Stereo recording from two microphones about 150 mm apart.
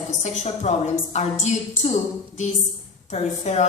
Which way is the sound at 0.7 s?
50° left (ahead or behind).